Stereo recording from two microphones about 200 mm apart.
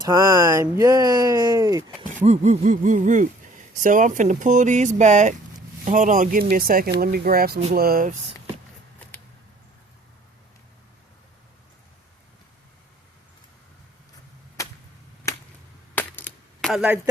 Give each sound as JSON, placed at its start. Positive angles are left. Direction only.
{"t": 0.0, "sound": "speech", "side_deg": -15}
{"t": 2.1, "sound": "speech", "side_deg": -35}
{"t": 16.0, "sound": "a sound", "side_deg": 10}